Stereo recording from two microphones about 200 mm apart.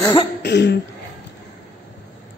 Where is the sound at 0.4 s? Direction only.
60° left (ahead or behind).